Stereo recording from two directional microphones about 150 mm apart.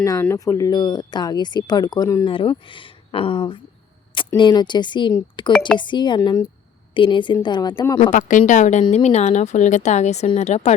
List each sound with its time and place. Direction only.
0.0 s speech: 20° left (ahead or behind)
2.2 s speech: 35° left (ahead or behind)
5.5 s speech: 5° left (ahead or behind)
5.7 s speech: 30° left (ahead or behind)
8.1 s speech: 60° left (ahead or behind)